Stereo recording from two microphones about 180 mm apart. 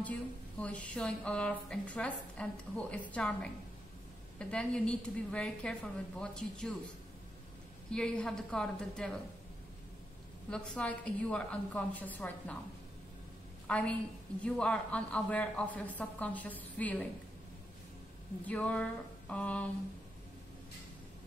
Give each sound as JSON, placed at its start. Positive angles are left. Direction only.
{"t": 0.6, "sound": "a woman's voice", "side_deg": 5}
{"t": 7.9, "sound": "a woman's voice", "side_deg": 5}
{"t": 10.5, "sound": "speech", "side_deg": 5}
{"t": 13.7, "sound": "a woman's voice", "side_deg": 5}
{"t": 18.4, "sound": "speech", "side_deg": 10}